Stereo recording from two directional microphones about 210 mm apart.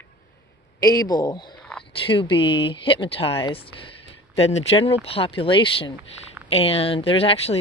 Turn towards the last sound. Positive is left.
turn(degrees=30)  # may be behind; listen again after turning